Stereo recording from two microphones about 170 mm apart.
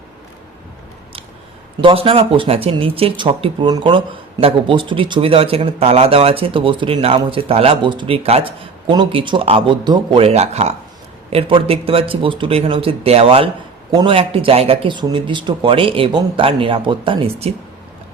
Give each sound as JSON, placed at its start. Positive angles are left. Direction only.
{"t": 1.8, "sound": "speech", "side_deg": -35}